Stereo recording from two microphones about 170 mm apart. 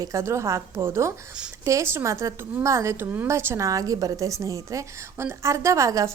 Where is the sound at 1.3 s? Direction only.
5° right (ahead or behind).